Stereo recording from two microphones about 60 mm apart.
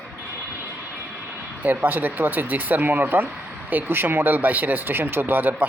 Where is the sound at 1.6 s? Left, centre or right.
Right.